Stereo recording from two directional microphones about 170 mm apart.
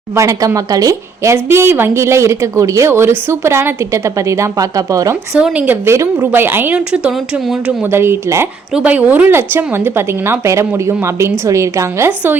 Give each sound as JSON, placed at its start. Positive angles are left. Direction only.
{"t": 0.2, "sound": "a woman's voice", "side_deg": -20}
{"t": 5.4, "sound": "a woman's voice", "side_deg": -10}